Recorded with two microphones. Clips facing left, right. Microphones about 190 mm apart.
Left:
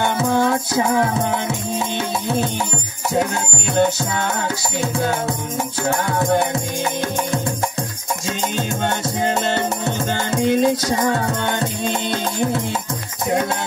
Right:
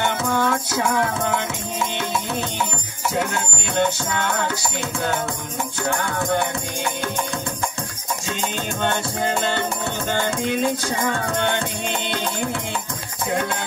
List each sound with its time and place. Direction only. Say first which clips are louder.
0.2 s music: left 4 dB; 40° left (ahead or behind)
5.9 s music: left 4 dB; 40° left (ahead or behind)
9.8 s music: left 2 dB; 40° left (ahead or behind)